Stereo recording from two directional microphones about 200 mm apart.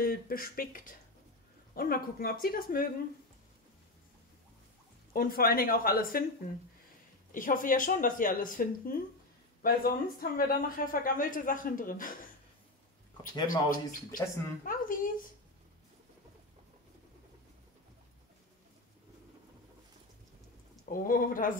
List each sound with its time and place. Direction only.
0.0 s speech: 45° left (ahead or behind)
5.1 s speech: 45° left (ahead or behind)
7.3 s speech: 45° left (ahead or behind)
13.2 s speech: 45° left (ahead or behind)
14.2 s speech: 15° left (ahead or behind)
14.6 s speech: 45° left (ahead or behind)
20.9 s speech: 45° left (ahead or behind)